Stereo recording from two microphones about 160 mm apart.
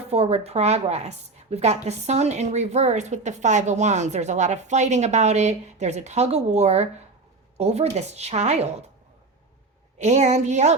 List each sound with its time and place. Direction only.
0.1 s a woman's voice: 40° right (ahead or behind)
10.0 s a woman's voice: 45° right (ahead or behind)